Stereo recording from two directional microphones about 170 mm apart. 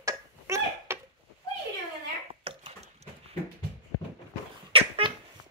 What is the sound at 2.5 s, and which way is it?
Dog, 35° right (ahead or behind).